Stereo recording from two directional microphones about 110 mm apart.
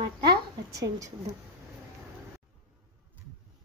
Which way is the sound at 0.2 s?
35° right (ahead or behind).